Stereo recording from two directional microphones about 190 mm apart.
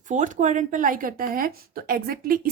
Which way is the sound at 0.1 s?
40° right (ahead or behind).